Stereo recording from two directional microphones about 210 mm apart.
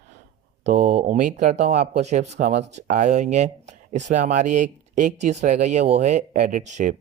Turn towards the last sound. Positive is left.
turn(degrees=-35)  # may be behind; listen again after turning